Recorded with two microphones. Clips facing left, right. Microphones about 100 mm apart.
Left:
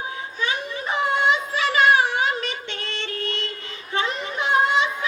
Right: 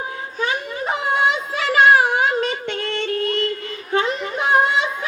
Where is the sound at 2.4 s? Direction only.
40° right (ahead or behind).